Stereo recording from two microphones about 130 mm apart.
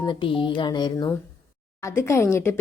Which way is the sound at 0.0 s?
40° left (ahead or behind).